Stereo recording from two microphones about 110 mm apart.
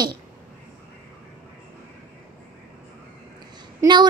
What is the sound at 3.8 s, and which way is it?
Speech, 40° right (ahead or behind).